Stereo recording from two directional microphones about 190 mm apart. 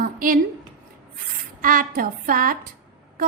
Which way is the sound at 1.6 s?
50° right (ahead or behind).